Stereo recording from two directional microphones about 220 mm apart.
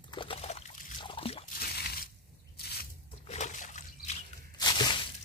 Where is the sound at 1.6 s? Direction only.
45° left (ahead or behind).